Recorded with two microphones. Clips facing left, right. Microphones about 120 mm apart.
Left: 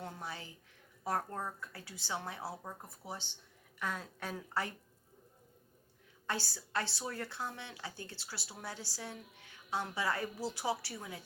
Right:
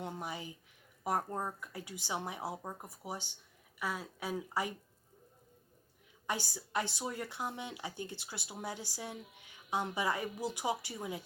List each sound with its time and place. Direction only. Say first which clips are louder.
0.0 s speech: right 3 dB; 20° right (ahead or behind)
6.2 s speech: right 1 dB; 15° right (ahead or behind)